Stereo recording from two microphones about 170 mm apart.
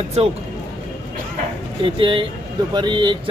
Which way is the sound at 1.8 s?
30° right (ahead or behind).